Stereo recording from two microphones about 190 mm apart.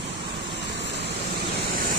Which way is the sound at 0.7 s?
65° right (ahead or behind).